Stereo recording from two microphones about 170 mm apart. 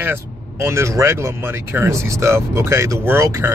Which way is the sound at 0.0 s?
15° right (ahead or behind).